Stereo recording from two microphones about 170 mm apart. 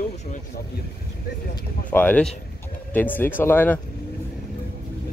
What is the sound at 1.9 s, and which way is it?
Speech, 10° left (ahead or behind).